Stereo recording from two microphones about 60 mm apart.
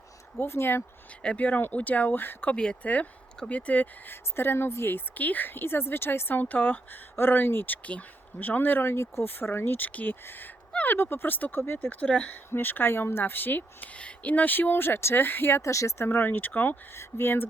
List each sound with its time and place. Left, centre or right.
0.3 s speech: left
1.2 s speech: left
2.5 s speech: centre
2.8 s speech: left
11.9 s speech: left
12.5 s speech: left
13.9 s speech: left
15.6 s speech: left
16.0 s speech: left